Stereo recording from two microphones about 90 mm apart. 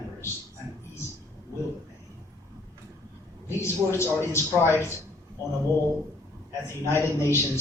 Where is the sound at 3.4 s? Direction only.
30° left (ahead or behind).